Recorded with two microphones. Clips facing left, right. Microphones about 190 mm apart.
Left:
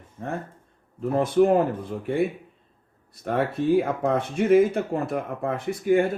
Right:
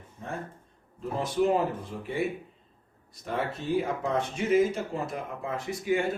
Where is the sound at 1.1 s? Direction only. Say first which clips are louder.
Left 7 dB; 55° left (ahead or behind).